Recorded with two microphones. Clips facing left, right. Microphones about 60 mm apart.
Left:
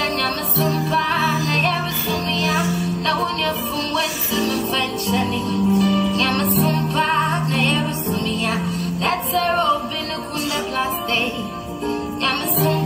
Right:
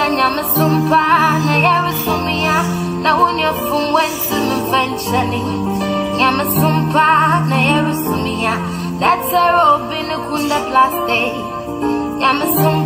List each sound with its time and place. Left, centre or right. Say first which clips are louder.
0.0 s music: right 7 dB; right
6.4 s music: right 4 dB; right
6.7 s music: right 7 dB; right
10.5 s music: right 12 dB; right
12.2 s music: right 8 dB; right